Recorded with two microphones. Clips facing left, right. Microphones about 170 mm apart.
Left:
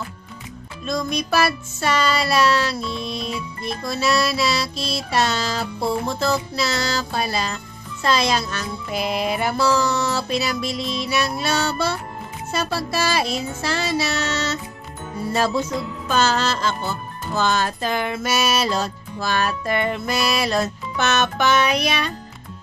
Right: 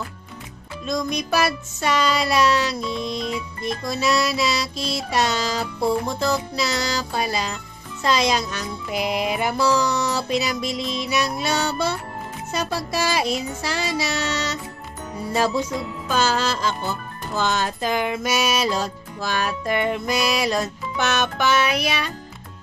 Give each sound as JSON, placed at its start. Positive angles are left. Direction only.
{"t": 0.8, "sound": "music", "side_deg": -15}